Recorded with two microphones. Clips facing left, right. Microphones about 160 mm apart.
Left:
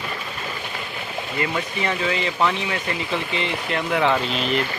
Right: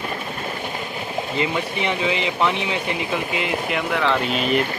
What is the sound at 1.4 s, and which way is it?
Speech, 15° right (ahead or behind).